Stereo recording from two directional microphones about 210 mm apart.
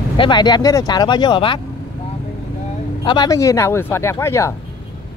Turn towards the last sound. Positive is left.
turn(degrees=10)  # may be behind; listen again after turning